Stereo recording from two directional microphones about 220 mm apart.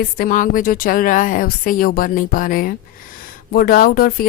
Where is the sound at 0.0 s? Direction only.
40° left (ahead or behind).